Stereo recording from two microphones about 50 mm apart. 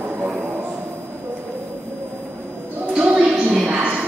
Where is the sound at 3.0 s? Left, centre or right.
Centre.